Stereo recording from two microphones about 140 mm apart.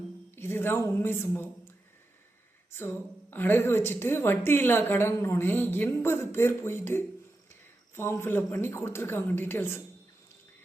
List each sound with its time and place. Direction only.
0.3 s speech: 15° left (ahead or behind)
2.7 s a woman's voice: 15° left (ahead or behind)